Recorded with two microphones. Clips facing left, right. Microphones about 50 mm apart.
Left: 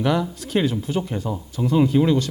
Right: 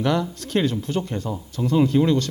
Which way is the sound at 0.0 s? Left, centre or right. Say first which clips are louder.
Left 1 dB; centre.